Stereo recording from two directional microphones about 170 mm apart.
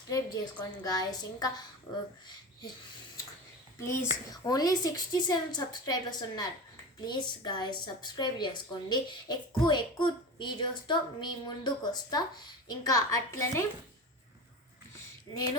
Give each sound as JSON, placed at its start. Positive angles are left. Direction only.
{"t": 0.6, "sound": "a woman's voice", "side_deg": 20}
{"t": 3.8, "sound": "a woman's voice", "side_deg": 15}